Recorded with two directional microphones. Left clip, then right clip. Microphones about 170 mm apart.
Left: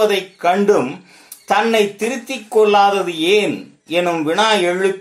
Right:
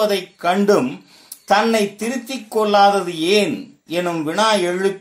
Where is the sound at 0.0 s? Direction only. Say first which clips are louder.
Left 3 dB; 30° right (ahead or behind).